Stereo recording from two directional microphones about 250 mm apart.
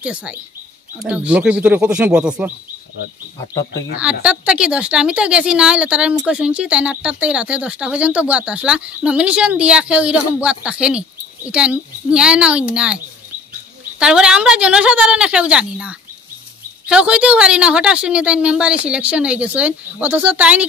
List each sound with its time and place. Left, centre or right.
0.0 s speech: centre
4.0 s speech: centre